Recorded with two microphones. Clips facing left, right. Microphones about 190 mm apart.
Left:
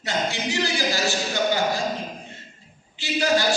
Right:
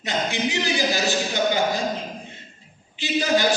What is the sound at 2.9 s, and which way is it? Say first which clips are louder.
Speech: right 1 dB; 20° right (ahead or behind).